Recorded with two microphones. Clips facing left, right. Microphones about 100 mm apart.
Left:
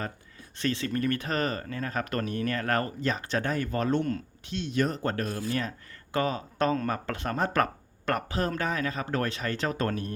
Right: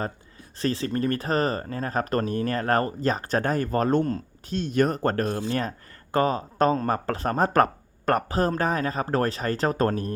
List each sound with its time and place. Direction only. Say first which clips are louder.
0.6 s speech: right 3 dB; 35° right (ahead or behind)